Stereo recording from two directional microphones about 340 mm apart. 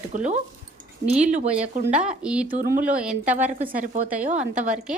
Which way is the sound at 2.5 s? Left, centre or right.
Right.